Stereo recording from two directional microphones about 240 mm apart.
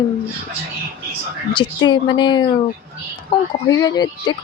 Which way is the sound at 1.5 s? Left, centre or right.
Centre.